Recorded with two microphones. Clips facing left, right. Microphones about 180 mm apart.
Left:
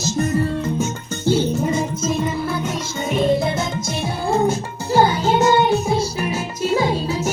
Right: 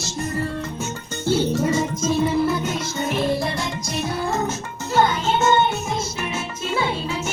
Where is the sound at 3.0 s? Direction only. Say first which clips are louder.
Left 5 dB; 20° left (ahead or behind).